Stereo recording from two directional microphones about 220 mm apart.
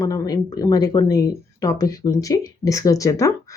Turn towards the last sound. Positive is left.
turn(degrees=15)  # may be behind; listen again after turning